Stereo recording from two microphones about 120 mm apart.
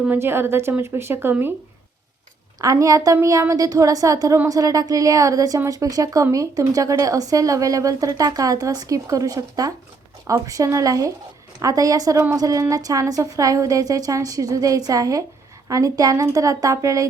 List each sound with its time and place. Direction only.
0.0 s speech: 15° right (ahead or behind)
2.6 s speech: 30° right (ahead or behind)